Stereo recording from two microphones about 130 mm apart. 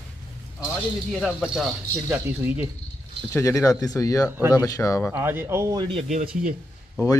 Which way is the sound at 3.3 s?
25° left (ahead or behind).